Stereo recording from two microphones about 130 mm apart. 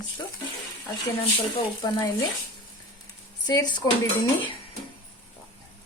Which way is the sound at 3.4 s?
30° left (ahead or behind).